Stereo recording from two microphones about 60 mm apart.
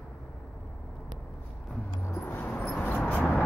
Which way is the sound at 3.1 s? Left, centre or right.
Left.